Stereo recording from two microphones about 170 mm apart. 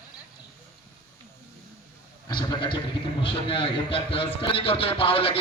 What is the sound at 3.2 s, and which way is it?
A man's voice, 30° left (ahead or behind).